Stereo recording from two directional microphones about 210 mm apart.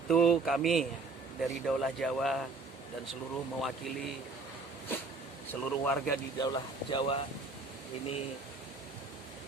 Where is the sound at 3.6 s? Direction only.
Centre (ahead or behind).